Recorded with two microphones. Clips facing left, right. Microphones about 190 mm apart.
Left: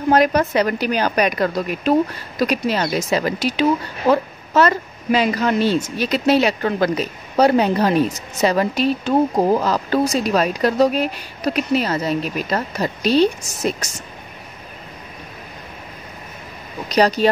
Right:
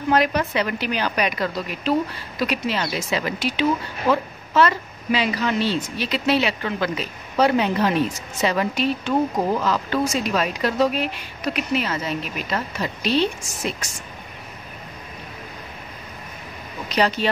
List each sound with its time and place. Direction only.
0.1 s a woman's voice: 45° left (ahead or behind)
16.9 s a woman's voice: 40° left (ahead or behind)